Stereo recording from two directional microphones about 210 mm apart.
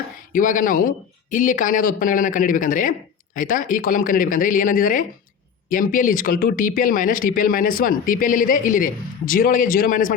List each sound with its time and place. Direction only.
0.3 s speech: 40° left (ahead or behind)